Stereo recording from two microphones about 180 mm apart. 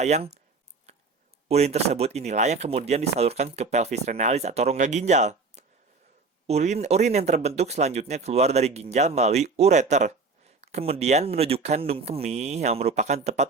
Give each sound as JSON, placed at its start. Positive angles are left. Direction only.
{"t": 0.0, "sound": "speech", "side_deg": -35}
{"t": 0.9, "sound": "a sound", "side_deg": -35}
{"t": 1.5, "sound": "speech", "side_deg": -35}